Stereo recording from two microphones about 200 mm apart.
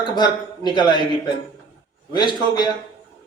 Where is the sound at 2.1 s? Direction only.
20° left (ahead or behind).